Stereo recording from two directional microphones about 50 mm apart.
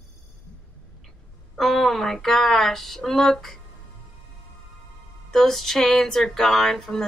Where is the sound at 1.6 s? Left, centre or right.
Centre.